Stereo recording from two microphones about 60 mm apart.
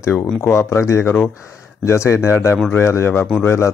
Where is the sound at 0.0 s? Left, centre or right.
Left.